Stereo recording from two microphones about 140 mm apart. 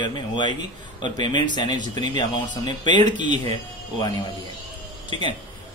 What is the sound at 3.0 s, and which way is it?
Speech, 60° right (ahead or behind).